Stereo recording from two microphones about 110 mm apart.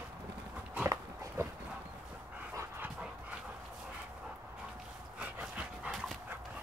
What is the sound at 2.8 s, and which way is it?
Dog, 10° right (ahead or behind).